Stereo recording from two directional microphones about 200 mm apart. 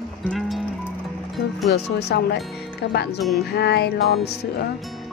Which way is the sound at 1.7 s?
55° left (ahead or behind).